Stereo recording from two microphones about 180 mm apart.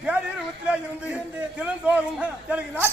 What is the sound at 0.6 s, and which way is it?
A man's voice, 5° right (ahead or behind).